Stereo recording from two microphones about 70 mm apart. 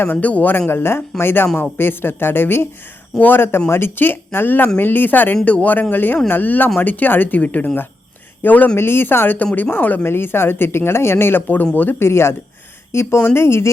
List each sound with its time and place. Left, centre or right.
0.0 s speech: left
11.9 s speech: left